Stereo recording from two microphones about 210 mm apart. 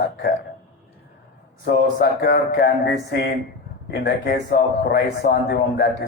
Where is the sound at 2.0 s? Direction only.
45° left (ahead or behind).